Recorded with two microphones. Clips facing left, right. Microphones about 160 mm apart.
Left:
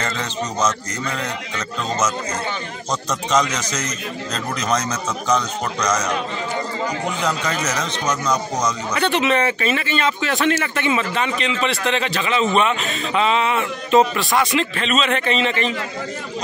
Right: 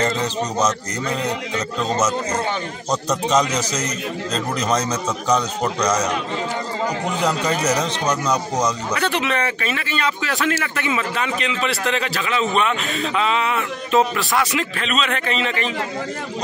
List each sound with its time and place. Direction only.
0.6 s a man's voice: 35° right (ahead or behind)
3.5 s a man's voice: 35° right (ahead or behind)
7.2 s a man's voice: 35° right (ahead or behind)
8.3 s speech: 10° right (ahead or behind)
8.9 s a man's voice: centre (ahead or behind)